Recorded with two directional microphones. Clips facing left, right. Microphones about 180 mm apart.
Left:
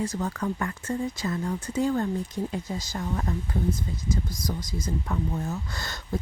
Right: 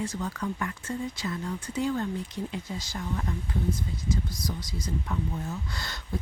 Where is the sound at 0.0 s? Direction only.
45° left (ahead or behind).